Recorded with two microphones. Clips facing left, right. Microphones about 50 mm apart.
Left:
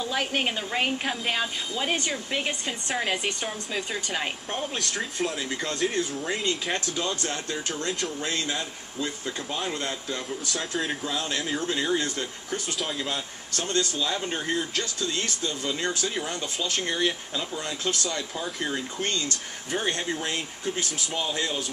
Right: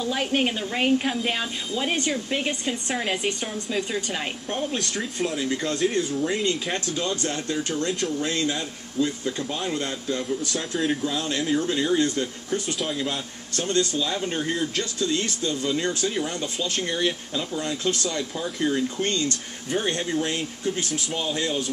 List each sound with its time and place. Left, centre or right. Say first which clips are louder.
0.0 s speech: right 3 dB; centre
13.6 s speech: right 3 dB; left
13.9 s speech: right 2 dB; centre
16.1 s speech: right 3 dB; centre
20.6 s speech: right 4 dB; centre
21.1 s speech: right 2 dB; centre